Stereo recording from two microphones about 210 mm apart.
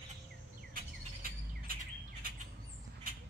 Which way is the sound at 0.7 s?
45° right (ahead or behind).